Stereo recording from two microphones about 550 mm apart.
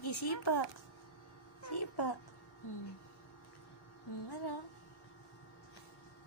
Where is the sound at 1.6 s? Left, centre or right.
Left.